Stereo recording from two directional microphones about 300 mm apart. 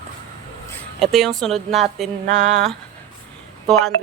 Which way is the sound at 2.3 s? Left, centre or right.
Right.